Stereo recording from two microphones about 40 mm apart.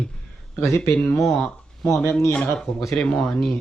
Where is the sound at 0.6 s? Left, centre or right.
Left.